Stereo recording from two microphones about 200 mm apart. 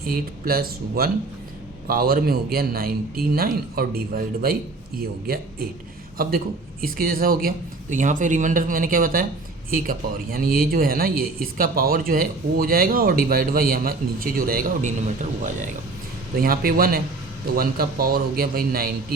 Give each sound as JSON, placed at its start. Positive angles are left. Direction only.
{"t": 0.0, "sound": "speech", "side_deg": -50}